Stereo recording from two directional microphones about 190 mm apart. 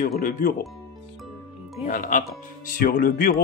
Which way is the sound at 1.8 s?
45° left (ahead or behind).